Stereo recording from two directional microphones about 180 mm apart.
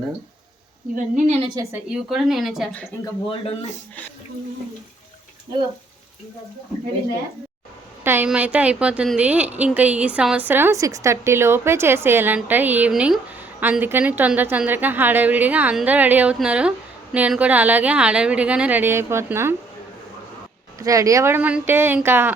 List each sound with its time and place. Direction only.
0.9 s speech: 40° right (ahead or behind)
1.7 s speech: 5° right (ahead or behind)
3.2 s a man's voice: 30° left (ahead or behind)
8.0 s a woman's voice: 10° right (ahead or behind)
20.7 s a woman's voice: 20° right (ahead or behind)